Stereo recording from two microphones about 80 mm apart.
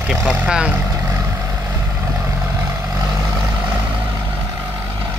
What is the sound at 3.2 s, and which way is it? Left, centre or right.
Vehicle, right.